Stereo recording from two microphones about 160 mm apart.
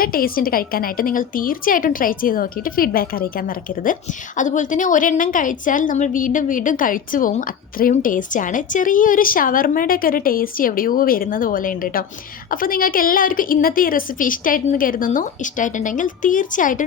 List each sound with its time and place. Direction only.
0.0 s a woman's voice: 65° left (ahead or behind)